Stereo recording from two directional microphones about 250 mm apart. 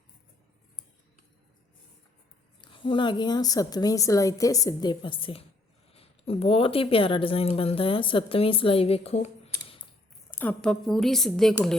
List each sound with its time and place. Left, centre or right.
2.6 s a woman's voice: centre
10.3 s a woman's voice: centre